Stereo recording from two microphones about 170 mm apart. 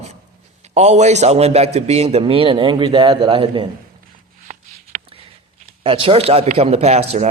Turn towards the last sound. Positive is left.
turn(degrees=-40)  # may be behind; listen again after turning